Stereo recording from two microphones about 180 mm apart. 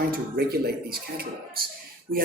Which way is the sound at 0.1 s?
60° right (ahead or behind).